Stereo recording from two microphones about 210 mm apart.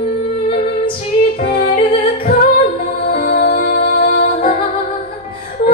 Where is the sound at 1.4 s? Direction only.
40° left (ahead or behind).